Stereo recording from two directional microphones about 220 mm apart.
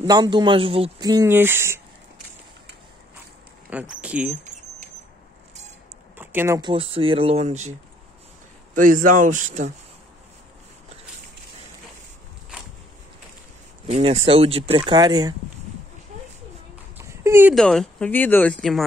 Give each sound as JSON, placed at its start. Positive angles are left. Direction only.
{"t": 0.0, "sound": "speech", "side_deg": -20}
{"t": 3.7, "sound": "speech", "side_deg": -5}
{"t": 6.1, "sound": "speech", "side_deg": -10}
{"t": 8.7, "sound": "speech", "side_deg": -35}
{"t": 13.8, "sound": "speech", "side_deg": -30}
{"t": 16.9, "sound": "a sound", "side_deg": -15}
{"t": 17.6, "sound": "speech", "side_deg": 5}